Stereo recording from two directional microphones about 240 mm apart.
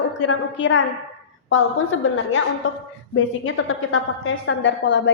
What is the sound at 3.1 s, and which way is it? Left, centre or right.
A woman's voice, left.